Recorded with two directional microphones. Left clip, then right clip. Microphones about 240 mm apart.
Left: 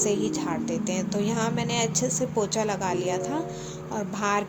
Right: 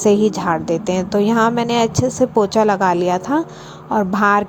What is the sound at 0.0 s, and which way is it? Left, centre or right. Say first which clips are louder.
A woman's voice: right 11 dB; right.